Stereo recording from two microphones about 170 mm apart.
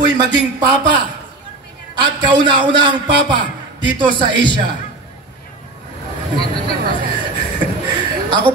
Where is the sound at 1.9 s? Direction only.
25° right (ahead or behind).